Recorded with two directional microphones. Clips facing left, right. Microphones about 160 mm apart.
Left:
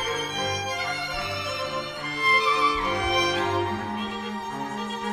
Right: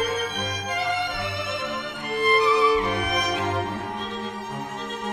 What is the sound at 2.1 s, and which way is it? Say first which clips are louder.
Music: right 7 dB; 60° right (ahead or behind).